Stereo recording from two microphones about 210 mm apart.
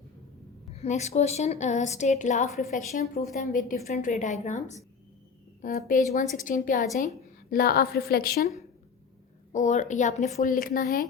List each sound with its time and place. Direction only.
0.8 s a woman's voice: 30° left (ahead or behind)
9.5 s a woman's voice: 35° left (ahead or behind)